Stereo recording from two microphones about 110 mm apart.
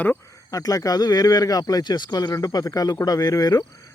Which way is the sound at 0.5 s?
30° left (ahead or behind).